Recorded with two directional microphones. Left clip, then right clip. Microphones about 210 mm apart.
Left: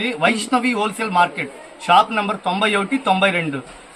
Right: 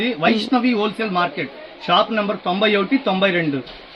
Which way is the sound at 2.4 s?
30° left (ahead or behind).